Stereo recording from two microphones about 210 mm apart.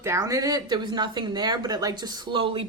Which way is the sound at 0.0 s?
15° right (ahead or behind).